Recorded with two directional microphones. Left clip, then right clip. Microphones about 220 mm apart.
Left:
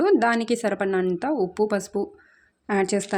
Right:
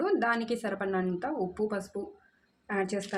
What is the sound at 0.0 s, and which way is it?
A woman's voice, 40° left (ahead or behind).